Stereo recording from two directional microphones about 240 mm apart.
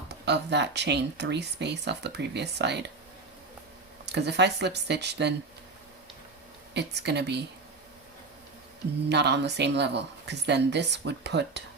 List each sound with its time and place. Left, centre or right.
0.3 s speech: right
4.0 s speech: right
6.7 s speech: right
9.0 s speech: right